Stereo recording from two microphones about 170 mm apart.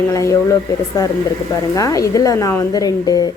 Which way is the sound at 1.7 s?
20° left (ahead or behind).